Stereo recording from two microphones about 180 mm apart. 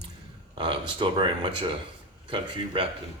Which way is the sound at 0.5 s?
30° right (ahead or behind).